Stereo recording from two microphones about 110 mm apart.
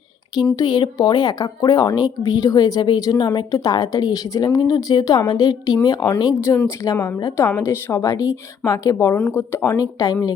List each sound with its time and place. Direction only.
0.5 s a woman's voice: 40° left (ahead or behind)